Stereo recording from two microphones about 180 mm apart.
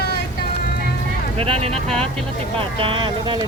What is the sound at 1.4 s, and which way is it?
Speech, 35° right (ahead or behind).